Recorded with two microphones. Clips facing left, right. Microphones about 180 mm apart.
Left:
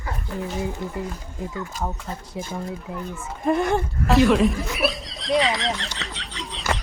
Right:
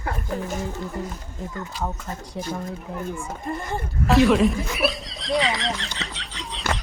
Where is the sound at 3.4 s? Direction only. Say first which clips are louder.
Left 11 dB; 75° left (ahead or behind).